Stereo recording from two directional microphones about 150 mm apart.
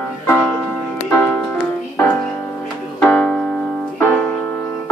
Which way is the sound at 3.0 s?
10° left (ahead or behind).